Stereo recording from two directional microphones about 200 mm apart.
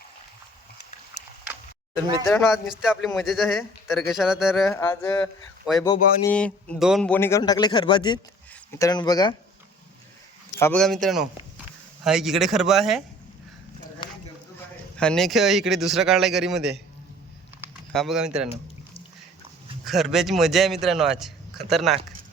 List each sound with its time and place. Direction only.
2.2 s speech: centre (ahead or behind)
4.7 s speech: 15° left (ahead or behind)
10.6 s speech: 5° left (ahead or behind)
14.9 s speech: 5° left (ahead or behind)
17.9 s speech: centre (ahead or behind)
19.8 s speech: centre (ahead or behind)